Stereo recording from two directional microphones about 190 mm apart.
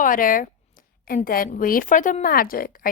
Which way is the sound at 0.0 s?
45° left (ahead or behind).